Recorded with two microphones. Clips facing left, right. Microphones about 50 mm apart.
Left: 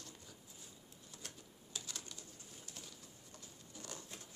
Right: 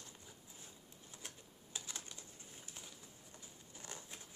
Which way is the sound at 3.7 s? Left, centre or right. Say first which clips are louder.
Left 2 dB; right.